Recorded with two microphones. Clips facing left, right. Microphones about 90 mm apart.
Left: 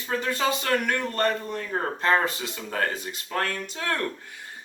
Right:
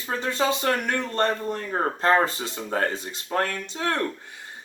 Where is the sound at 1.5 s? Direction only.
40° right (ahead or behind).